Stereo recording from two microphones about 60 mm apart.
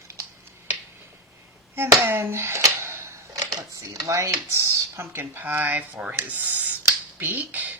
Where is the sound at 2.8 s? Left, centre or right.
Right.